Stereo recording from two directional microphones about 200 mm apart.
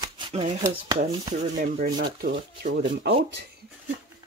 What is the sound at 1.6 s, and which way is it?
Speech, 40° right (ahead or behind).